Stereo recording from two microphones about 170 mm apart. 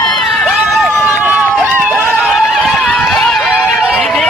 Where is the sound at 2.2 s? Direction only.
5° right (ahead or behind).